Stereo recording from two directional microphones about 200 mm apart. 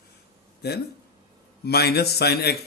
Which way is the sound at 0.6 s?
55° left (ahead or behind).